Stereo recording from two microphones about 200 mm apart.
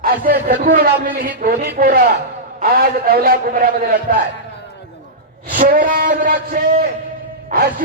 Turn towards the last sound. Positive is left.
turn(degrees=-45)  # may be behind; listen again after turning